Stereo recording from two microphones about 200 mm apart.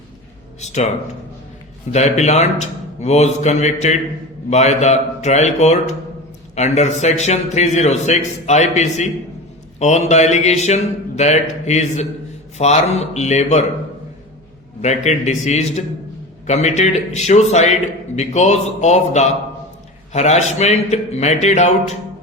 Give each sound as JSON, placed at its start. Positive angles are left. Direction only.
{"t": 0.6, "sound": "speech", "side_deg": 35}
{"t": 1.9, "sound": "a man's voice", "side_deg": 35}
{"t": 14.8, "sound": "a man's voice", "side_deg": 35}